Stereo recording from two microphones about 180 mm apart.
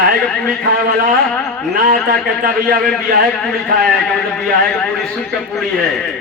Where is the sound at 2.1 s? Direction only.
55° right (ahead or behind).